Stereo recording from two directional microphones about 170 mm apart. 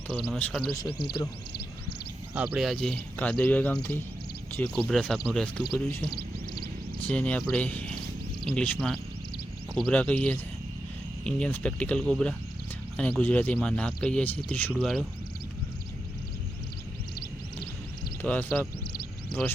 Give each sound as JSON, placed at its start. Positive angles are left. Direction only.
{"t": 0.3, "sound": "speech", "side_deg": 5}
{"t": 2.3, "sound": "speech", "side_deg": -10}
{"t": 7.1, "sound": "speech", "side_deg": 5}
{"t": 18.2, "sound": "speech", "side_deg": 10}